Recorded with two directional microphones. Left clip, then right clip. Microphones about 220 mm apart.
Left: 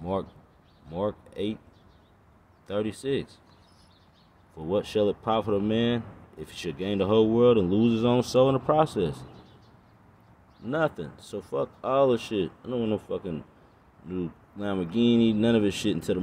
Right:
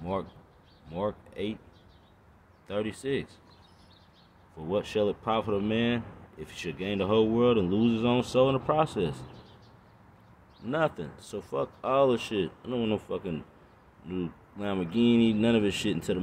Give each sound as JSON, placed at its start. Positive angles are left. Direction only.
{"t": 0.0, "sound": "speech", "side_deg": 20}
{"t": 2.7, "sound": "speech", "side_deg": 20}
{"t": 4.6, "sound": "speech", "side_deg": 20}
{"t": 10.7, "sound": "speech", "side_deg": 15}